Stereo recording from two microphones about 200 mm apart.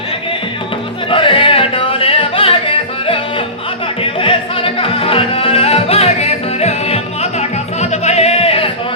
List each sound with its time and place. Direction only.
1.1 s music: 25° left (ahead or behind)